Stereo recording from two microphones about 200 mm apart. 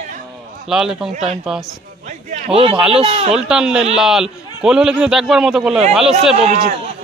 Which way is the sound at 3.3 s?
5° right (ahead or behind).